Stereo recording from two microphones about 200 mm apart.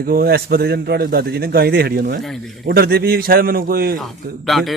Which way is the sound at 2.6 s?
50° right (ahead or behind).